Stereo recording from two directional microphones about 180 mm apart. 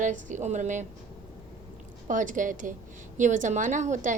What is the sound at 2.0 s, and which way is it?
A woman's voice, 45° right (ahead or behind).